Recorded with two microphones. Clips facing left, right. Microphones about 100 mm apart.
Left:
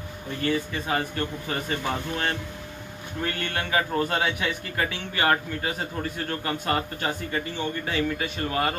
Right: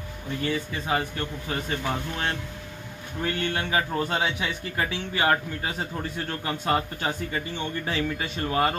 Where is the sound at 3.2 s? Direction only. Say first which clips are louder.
Right 2 dB; 15° right (ahead or behind).